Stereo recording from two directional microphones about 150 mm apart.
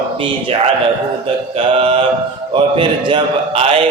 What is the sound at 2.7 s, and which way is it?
A man's voice, 35° right (ahead or behind).